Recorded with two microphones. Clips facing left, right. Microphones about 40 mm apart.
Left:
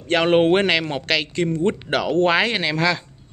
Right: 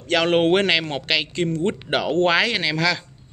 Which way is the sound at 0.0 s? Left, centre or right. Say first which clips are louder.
Left 2 dB; left.